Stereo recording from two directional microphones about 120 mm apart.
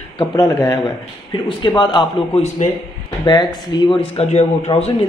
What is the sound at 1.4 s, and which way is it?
Speech, 40° left (ahead or behind).